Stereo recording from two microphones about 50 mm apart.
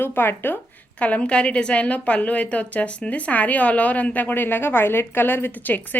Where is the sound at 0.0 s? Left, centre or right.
Left.